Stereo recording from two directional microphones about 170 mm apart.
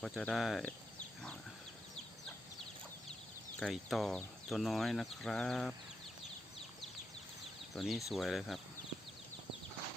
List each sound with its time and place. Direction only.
0.0 s a sound: centre (ahead or behind)
3.6 s speech: centre (ahead or behind)
7.8 s speech: centre (ahead or behind)